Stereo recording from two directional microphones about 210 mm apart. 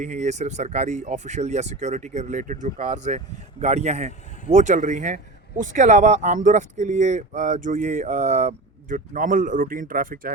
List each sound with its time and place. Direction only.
0.0 s speech: 35° right (ahead or behind)